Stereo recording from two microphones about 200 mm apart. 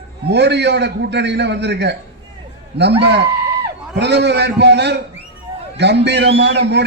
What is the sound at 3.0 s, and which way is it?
Speech, 55° right (ahead or behind).